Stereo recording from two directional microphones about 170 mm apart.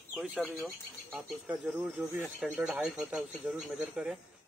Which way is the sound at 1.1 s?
5° right (ahead or behind).